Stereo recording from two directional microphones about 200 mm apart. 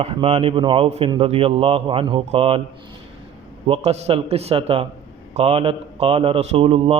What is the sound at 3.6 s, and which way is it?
Speech, 30° right (ahead or behind).